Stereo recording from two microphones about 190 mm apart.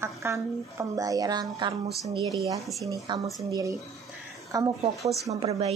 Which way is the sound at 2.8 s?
15° right (ahead or behind).